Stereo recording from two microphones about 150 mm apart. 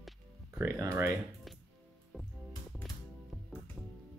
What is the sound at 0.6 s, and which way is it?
Speech, 15° right (ahead or behind).